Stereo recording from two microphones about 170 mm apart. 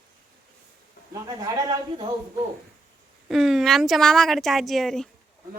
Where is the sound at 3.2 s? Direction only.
Centre (ahead or behind).